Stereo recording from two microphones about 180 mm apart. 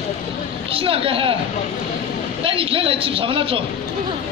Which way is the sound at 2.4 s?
30° right (ahead or behind).